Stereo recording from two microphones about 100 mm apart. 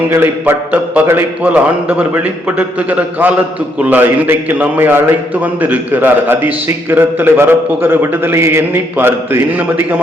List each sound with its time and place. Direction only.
0.1 s a man's voice: 20° right (ahead or behind)